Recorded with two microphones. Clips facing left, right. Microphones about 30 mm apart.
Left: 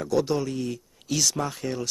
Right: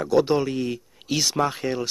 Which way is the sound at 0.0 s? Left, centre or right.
Right.